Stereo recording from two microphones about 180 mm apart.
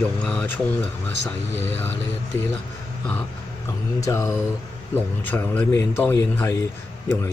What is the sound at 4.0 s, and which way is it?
Speech, 15° left (ahead or behind).